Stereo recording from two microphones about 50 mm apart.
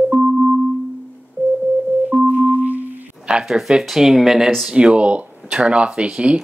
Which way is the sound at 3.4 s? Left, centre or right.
Centre.